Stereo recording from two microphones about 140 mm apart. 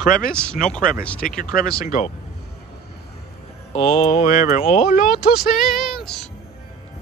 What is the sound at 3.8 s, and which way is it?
Mantra, 45° left (ahead or behind).